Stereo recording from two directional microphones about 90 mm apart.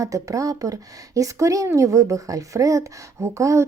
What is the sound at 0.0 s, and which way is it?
Speech, 40° right (ahead or behind).